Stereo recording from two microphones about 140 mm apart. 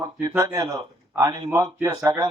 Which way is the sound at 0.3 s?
25° right (ahead or behind).